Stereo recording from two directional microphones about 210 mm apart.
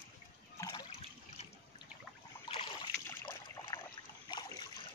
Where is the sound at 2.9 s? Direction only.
10° left (ahead or behind).